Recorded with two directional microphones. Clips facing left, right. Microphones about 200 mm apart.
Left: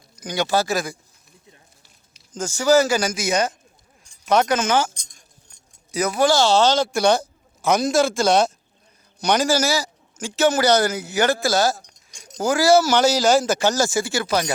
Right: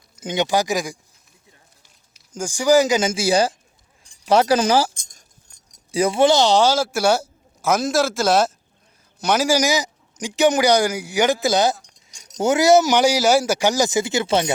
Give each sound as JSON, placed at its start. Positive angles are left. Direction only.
{"t": 0.2, "sound": "speech", "side_deg": -20}
{"t": 2.3, "sound": "speech", "side_deg": -10}
{"t": 4.9, "sound": "keys jangling", "side_deg": -45}
{"t": 5.9, "sound": "a man's voice", "side_deg": -30}